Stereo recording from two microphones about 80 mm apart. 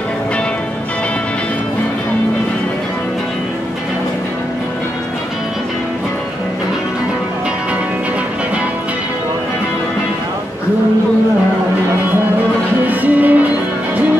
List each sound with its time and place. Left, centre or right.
12.8 s music: right